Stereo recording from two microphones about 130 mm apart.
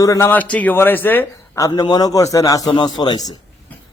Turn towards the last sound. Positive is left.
turn(degrees=35)  # may be behind; listen again after turning